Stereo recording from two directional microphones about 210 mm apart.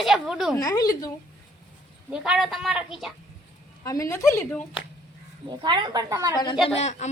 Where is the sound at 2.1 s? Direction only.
5° right (ahead or behind).